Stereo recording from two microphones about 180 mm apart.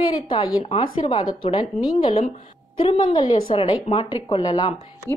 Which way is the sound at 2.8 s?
30° left (ahead or behind).